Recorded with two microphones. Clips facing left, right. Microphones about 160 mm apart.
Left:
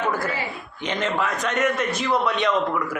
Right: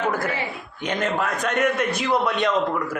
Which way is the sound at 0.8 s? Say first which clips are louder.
Right 1 dB; 50° right (ahead or behind).